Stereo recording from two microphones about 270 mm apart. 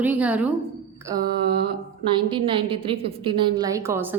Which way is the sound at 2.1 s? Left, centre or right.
Centre.